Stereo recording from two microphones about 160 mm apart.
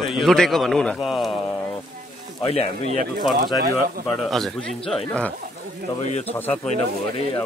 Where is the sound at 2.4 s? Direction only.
40° left (ahead or behind).